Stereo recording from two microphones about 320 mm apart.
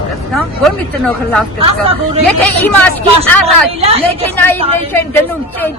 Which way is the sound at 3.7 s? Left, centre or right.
Centre.